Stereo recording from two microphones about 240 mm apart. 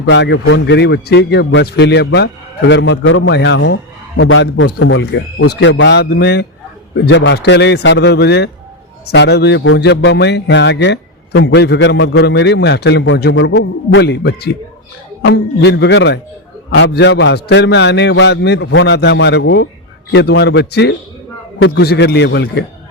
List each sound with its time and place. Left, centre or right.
0.0 s speech: left